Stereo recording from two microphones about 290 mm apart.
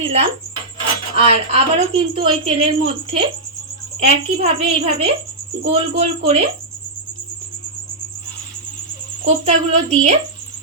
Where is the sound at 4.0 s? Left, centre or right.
Right.